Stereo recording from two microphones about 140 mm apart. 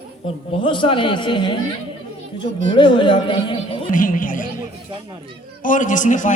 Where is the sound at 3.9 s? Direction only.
70° left (ahead or behind).